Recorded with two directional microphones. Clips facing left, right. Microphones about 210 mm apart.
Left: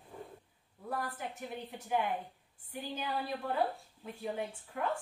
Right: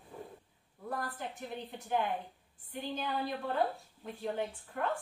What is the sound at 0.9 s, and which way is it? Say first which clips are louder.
A woman's voice: even; 10° left (ahead or behind).